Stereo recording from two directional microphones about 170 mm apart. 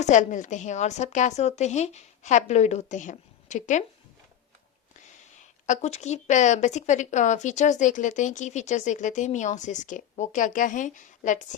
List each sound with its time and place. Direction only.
0.0 s a woman's voice: 45° left (ahead or behind)
5.4 s a woman's voice: 45° left (ahead or behind)